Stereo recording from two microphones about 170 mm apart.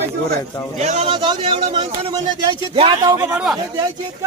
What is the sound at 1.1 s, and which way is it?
Speech, 30° right (ahead or behind).